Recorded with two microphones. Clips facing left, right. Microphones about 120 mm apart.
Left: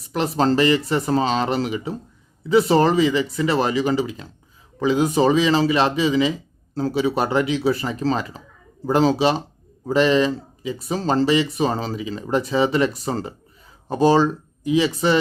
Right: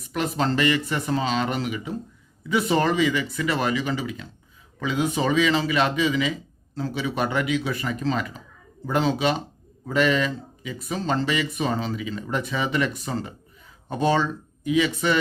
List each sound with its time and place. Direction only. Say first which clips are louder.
0.1 s speech: left 5 dB; 35° left (ahead or behind)